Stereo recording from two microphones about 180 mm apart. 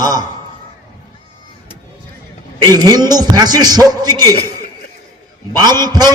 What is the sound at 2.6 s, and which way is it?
A man's voice, 20° right (ahead or behind).